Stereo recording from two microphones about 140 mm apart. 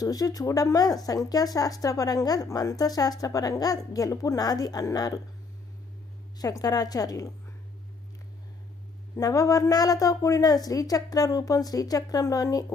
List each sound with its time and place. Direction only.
0.0 s speech: 25° left (ahead or behind)
6.4 s speech: 25° left (ahead or behind)
9.1 s speech: 25° left (ahead or behind)